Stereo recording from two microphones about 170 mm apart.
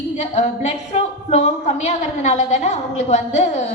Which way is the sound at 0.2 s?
40° left (ahead or behind).